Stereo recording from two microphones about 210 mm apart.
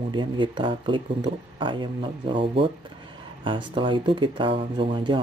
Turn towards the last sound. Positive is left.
turn(degrees=-25)  # may be behind; listen again after turning